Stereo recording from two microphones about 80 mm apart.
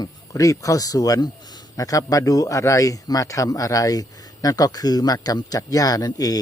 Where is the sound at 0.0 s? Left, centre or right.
Left.